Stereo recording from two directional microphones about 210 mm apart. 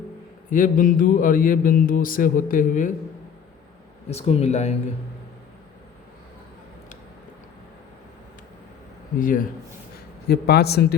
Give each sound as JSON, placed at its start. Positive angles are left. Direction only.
{"t": 0.5, "sound": "mantra", "side_deg": 40}
{"t": 4.1, "sound": "mantra", "side_deg": 30}
{"t": 9.1, "sound": "mantra", "side_deg": 40}
{"t": 10.2, "sound": "a man's voice", "side_deg": 50}